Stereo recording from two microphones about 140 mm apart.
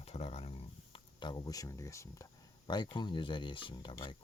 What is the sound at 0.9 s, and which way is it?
Speech, 35° left (ahead or behind).